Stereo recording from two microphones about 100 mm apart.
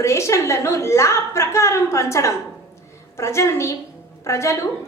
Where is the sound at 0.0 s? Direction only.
30° left (ahead or behind).